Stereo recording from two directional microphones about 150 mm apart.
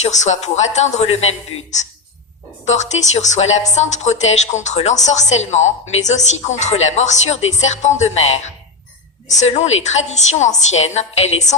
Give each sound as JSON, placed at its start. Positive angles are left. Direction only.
{"t": 0.0, "sound": "a woman's voice", "side_deg": 50}
{"t": 2.6, "sound": "a woman's voice", "side_deg": 50}